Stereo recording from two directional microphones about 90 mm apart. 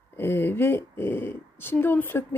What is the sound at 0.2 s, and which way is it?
Speech, 25° left (ahead or behind).